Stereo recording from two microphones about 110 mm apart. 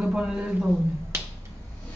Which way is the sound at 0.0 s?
5° right (ahead or behind).